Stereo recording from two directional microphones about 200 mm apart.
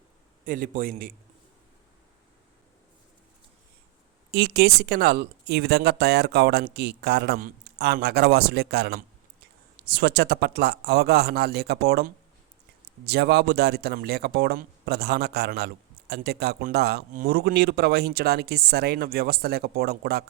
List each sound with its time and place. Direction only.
0.4 s speech: 45° right (ahead or behind)
4.3 s speech: 55° right (ahead or behind)